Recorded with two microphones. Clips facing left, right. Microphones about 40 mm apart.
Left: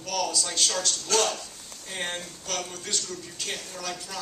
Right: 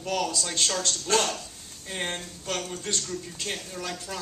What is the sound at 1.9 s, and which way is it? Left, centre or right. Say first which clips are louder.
Speech: right 1 dB; centre.